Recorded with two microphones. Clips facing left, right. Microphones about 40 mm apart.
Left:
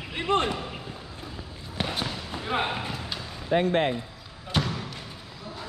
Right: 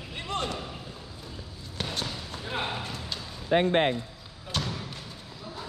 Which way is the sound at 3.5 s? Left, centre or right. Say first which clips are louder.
Even; right.